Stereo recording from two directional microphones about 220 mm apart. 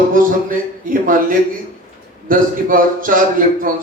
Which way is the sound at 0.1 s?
40° right (ahead or behind).